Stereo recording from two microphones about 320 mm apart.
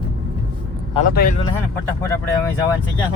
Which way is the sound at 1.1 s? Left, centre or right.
Left.